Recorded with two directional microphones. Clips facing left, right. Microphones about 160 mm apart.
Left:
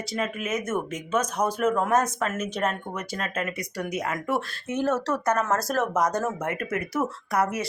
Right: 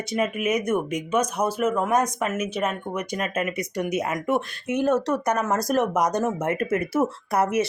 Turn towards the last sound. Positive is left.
turn(degrees=-25)  # may be behind; listen again after turning